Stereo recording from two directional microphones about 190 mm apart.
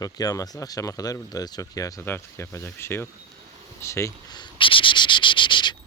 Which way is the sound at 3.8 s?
15° left (ahead or behind).